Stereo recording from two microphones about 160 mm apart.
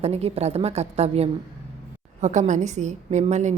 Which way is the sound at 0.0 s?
40° right (ahead or behind).